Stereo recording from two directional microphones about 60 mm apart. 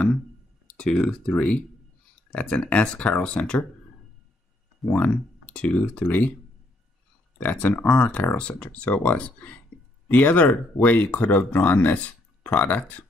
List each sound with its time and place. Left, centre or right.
0.7 s speech: centre
4.8 s speech: left
7.6 s speech: left